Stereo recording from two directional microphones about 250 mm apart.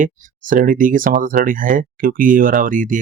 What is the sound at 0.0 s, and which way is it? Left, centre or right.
Speech, right.